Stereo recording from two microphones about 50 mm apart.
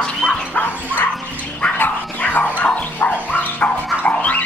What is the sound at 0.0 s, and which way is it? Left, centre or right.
Bow-wow, centre.